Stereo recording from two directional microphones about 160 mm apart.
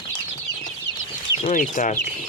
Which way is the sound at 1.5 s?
55° left (ahead or behind).